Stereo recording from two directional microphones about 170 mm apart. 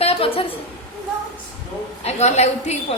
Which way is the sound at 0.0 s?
35° left (ahead or behind).